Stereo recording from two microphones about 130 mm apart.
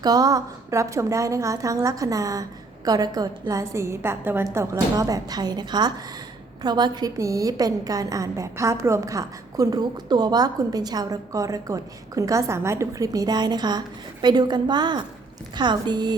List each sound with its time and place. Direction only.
0.0 s a woman's voice: 30° right (ahead or behind)